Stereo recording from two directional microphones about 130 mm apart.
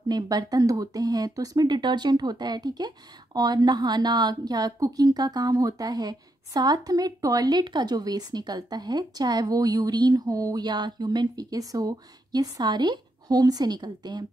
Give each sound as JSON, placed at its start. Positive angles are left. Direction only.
{"t": 0.1, "sound": "speech", "side_deg": -30}